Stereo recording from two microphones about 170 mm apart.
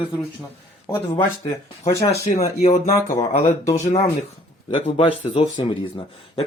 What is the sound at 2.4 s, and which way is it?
Speech, 40° left (ahead or behind).